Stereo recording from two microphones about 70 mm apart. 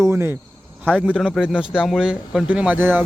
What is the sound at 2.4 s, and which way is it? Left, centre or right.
Speech, centre.